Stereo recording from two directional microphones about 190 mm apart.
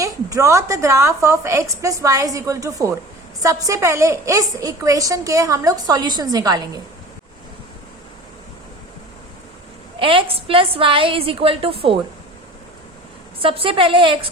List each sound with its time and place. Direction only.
0.0 s a woman's voice: 15° right (ahead or behind)
10.0 s a woman's voice: 30° right (ahead or behind)
13.4 s a woman's voice: 30° right (ahead or behind)